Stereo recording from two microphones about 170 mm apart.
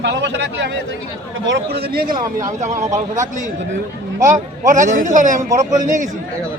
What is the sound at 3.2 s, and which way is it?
A man's voice, 45° right (ahead or behind).